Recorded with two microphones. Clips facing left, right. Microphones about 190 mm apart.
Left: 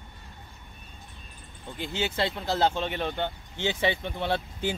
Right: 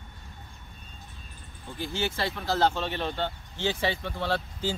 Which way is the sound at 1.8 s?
25° left (ahead or behind).